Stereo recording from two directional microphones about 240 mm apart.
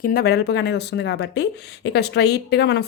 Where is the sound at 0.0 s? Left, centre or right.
Left.